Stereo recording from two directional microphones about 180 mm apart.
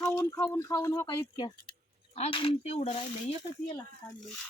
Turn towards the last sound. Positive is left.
turn(degrees=25)  # may be behind; listen again after turning